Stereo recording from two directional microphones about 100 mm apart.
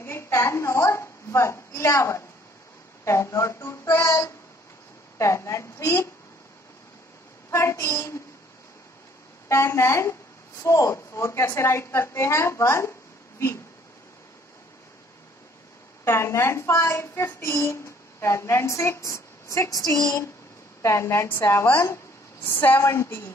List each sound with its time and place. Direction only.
0.0 s a woman's voice: 25° left (ahead or behind)
7.5 s speech: 30° left (ahead or behind)
9.5 s speech: 25° left (ahead or behind)
16.0 s speech: 25° left (ahead or behind)
20.8 s a woman's voice: 25° left (ahead or behind)